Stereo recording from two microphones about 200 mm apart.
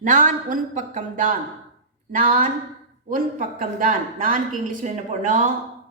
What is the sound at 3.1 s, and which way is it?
A woman's voice, 45° right (ahead or behind).